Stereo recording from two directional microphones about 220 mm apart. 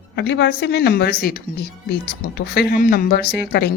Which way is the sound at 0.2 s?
50° left (ahead or behind).